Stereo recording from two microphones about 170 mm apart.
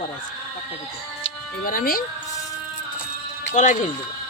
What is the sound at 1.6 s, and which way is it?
Speech, 55° left (ahead or behind).